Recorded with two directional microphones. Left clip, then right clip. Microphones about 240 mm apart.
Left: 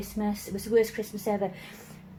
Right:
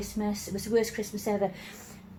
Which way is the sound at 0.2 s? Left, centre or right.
Centre.